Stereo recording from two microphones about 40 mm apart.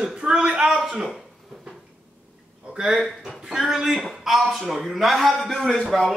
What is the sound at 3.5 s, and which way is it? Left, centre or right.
A man's voice, centre.